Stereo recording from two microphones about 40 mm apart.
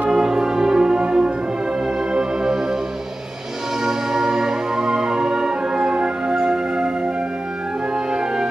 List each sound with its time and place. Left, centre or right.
0.1 s music: centre
3.8 s music: centre
8.1 s music: centre